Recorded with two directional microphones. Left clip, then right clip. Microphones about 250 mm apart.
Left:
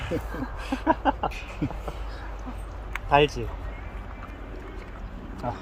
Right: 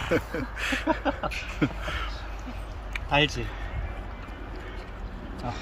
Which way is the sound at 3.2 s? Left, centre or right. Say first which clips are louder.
Left 3 dB; left.